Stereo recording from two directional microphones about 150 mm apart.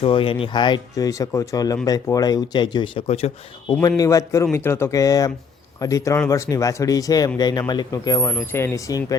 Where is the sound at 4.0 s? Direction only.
20° left (ahead or behind).